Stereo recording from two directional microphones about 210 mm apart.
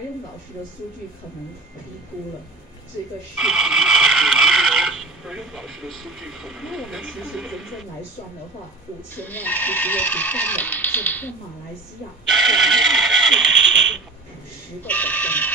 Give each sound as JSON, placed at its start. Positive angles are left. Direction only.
{"t": 3.3, "sound": "speech", "side_deg": 0}
{"t": 9.1, "sound": "speech", "side_deg": 10}
{"t": 12.3, "sound": "music", "side_deg": 0}
{"t": 14.9, "sound": "a sound", "side_deg": 5}